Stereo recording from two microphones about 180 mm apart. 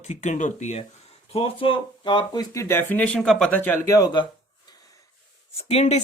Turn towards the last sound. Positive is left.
turn(degrees=35)  # may be behind; listen again after turning